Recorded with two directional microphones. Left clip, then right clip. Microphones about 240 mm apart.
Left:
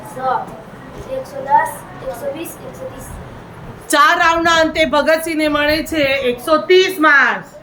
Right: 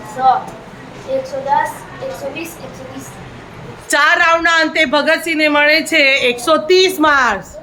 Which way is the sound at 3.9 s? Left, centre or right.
Centre.